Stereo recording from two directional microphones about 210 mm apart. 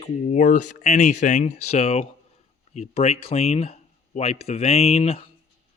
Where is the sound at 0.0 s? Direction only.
35° left (ahead or behind).